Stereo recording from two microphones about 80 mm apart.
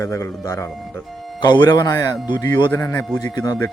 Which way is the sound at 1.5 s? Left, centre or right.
Left.